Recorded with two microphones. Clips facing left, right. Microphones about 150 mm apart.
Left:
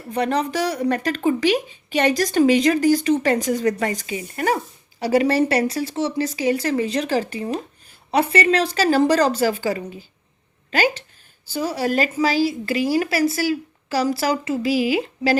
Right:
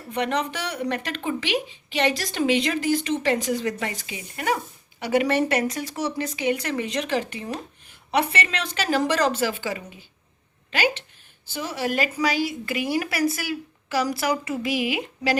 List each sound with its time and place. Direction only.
0.1 s speech: 35° left (ahead or behind)